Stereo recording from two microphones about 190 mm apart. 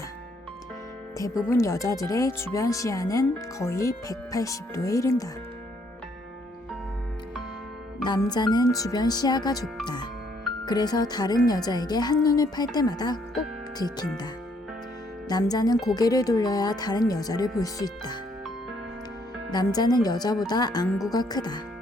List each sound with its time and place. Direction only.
1.5 s speech: 15° left (ahead or behind)
8.0 s speech: 20° left (ahead or behind)
15.3 s speech: 20° left (ahead or behind)
19.5 s speech: 20° left (ahead or behind)